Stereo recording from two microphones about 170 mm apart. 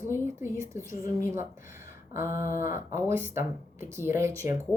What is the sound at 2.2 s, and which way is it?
Speech, 15° right (ahead or behind).